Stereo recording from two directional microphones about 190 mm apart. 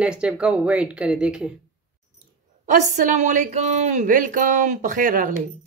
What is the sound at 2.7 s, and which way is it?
Speech, 40° right (ahead or behind).